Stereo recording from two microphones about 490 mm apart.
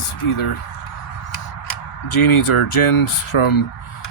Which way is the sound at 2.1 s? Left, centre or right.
Left.